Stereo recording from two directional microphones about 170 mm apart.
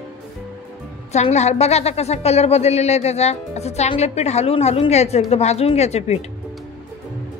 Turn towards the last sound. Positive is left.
turn(degrees=40)  # may be behind; listen again after turning